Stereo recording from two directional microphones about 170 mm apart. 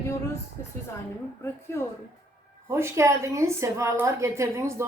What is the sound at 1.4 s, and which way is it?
Speech, 15° left (ahead or behind).